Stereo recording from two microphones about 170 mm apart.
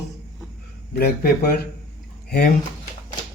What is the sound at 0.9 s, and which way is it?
Speech, 65° left (ahead or behind).